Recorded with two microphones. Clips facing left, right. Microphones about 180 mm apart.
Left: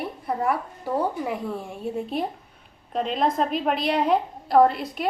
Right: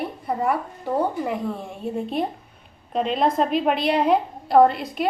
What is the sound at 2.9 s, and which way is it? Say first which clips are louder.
A woman's voice: right 3 dB; centre (ahead or behind).